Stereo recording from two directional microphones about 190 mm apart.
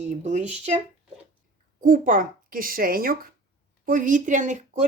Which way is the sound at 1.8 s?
45° right (ahead or behind).